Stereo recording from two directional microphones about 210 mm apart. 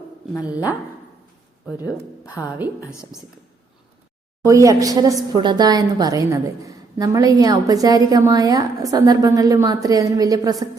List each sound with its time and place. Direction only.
0.3 s a woman's voice: 5° right (ahead or behind)
1.6 s a woman's voice: 10° right (ahead or behind)
4.4 s a woman's voice: 15° right (ahead or behind)